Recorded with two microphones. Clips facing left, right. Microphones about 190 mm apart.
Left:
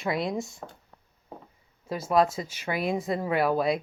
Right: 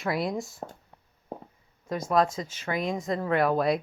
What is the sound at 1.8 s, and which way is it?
Speech, 5° left (ahead or behind).